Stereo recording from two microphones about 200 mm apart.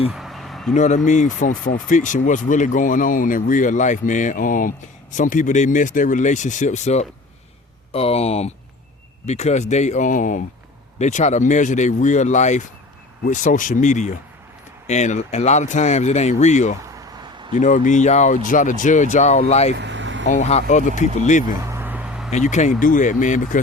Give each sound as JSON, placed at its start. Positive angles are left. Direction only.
{"t": 0.1, "sound": "vehicle", "side_deg": 0}
{"t": 0.7, "sound": "speech", "side_deg": 35}
{"t": 19.7, "sound": "vehicle", "side_deg": -65}
{"t": 20.2, "sound": "speech", "side_deg": 35}
{"t": 21.5, "sound": "a sound", "side_deg": -15}
{"t": 22.3, "sound": "speech", "side_deg": 35}